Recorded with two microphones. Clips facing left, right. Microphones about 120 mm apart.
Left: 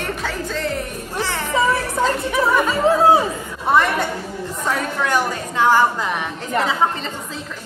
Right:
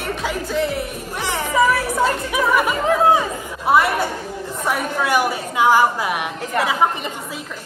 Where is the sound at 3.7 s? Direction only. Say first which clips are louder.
Right 1 dB; 10° right (ahead or behind).